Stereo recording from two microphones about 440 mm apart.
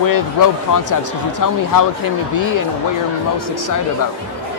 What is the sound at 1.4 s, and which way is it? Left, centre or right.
Speech, left.